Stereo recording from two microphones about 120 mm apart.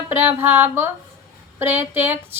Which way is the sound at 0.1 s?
15° right (ahead or behind).